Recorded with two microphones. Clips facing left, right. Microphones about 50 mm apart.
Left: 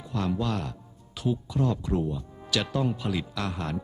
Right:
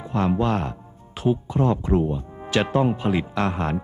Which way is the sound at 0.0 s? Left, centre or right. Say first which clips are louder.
Right 7 dB; right.